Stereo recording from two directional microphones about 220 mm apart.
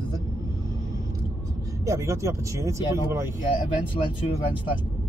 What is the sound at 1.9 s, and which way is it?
Speech, 15° right (ahead or behind).